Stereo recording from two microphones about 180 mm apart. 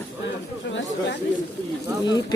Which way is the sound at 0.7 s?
80° left.